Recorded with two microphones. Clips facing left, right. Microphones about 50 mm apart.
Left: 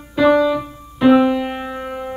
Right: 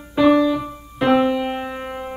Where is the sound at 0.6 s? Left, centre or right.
Centre.